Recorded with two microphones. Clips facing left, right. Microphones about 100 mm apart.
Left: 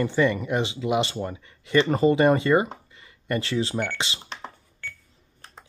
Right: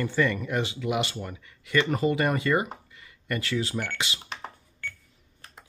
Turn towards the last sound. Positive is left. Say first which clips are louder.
# even
turn(degrees=-5)  # may be behind; listen again after turning